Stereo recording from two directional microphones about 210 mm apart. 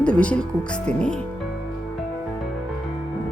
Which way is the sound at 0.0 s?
5° left (ahead or behind).